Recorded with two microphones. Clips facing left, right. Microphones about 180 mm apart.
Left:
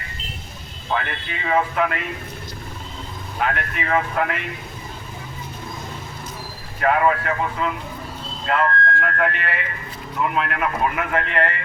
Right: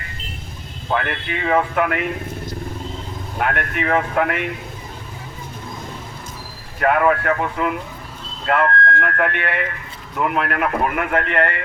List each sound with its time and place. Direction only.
0.9 s speech: 55° right (ahead or behind)
3.3 s speech: 55° right (ahead or behind)
6.7 s speech: 55° right (ahead or behind)